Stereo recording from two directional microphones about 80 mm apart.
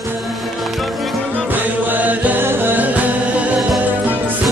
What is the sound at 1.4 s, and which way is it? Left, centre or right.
Music, right.